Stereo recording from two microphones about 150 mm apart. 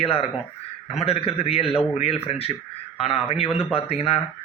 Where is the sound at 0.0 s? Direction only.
40° left (ahead or behind).